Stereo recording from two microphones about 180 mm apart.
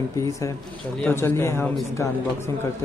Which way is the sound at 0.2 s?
15° left (ahead or behind).